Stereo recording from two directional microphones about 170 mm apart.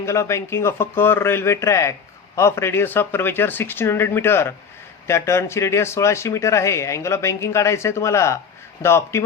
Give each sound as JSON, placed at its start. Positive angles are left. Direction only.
{"t": 0.0, "sound": "a man's voice", "side_deg": 15}